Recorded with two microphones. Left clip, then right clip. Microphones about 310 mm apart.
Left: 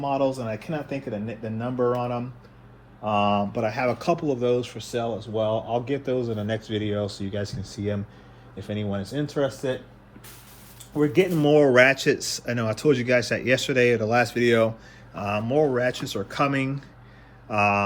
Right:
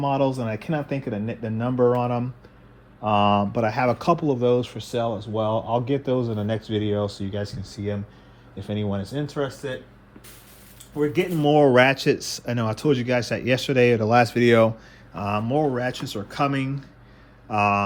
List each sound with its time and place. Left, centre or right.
0.0 s speech: right; by 8.0 s centre
8.5 s speech: centre
10.9 s speech: centre